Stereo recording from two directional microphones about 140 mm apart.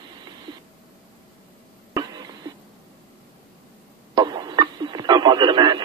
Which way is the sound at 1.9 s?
30° right (ahead or behind).